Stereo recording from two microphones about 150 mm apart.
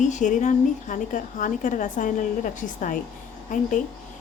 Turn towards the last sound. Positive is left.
turn(degrees=60)  # may be behind; listen again after turning